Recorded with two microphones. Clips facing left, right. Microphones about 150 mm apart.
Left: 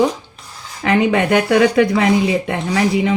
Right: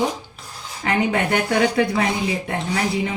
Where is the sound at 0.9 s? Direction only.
90° left.